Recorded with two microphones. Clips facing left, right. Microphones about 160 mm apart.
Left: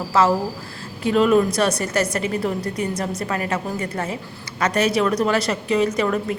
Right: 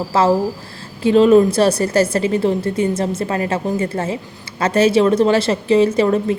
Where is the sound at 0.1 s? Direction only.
30° right (ahead or behind).